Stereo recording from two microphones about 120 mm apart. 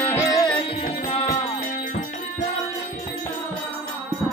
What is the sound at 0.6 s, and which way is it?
Music, 55° left (ahead or behind).